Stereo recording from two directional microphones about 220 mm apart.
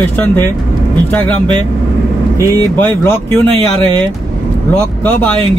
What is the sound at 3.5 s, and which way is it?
Speech, 25° right (ahead or behind).